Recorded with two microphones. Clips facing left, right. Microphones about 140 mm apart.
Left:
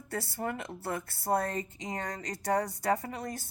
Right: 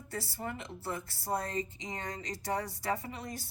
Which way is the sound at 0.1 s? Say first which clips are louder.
Left 4 dB; 60° left (ahead or behind).